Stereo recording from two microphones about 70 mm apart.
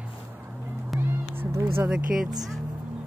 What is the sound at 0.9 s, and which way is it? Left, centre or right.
Cat, right.